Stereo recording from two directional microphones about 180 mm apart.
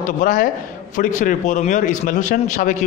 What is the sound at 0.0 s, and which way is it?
A man's voice, 45° left (ahead or behind).